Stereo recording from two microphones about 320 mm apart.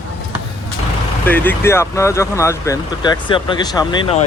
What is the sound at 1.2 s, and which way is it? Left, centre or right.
Speech, centre.